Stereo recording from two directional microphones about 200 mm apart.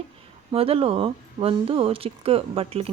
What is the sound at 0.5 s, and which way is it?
Speech, 30° right (ahead or behind).